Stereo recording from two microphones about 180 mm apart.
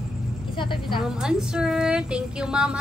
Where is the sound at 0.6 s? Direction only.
25° left (ahead or behind).